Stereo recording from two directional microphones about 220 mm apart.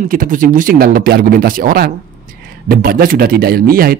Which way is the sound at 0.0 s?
40° right (ahead or behind).